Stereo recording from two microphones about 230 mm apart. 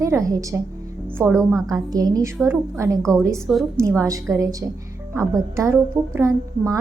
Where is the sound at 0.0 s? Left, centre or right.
Centre.